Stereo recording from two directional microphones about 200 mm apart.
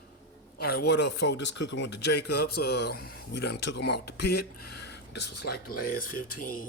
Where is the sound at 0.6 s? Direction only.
50° left (ahead or behind).